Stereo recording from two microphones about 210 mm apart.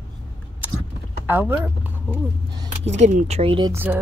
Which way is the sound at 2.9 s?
35° right (ahead or behind).